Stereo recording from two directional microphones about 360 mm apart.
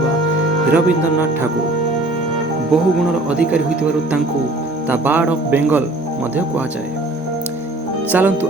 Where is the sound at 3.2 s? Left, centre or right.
Centre.